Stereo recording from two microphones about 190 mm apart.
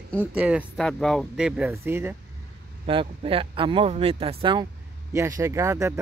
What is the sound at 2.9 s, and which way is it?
Speech, 30° right (ahead or behind).